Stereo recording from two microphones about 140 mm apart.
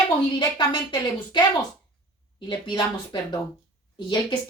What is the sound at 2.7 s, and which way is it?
Speech, 30° left (ahead or behind).